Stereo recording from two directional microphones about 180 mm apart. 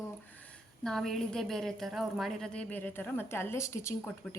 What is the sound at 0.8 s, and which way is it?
A woman's voice, centre (ahead or behind).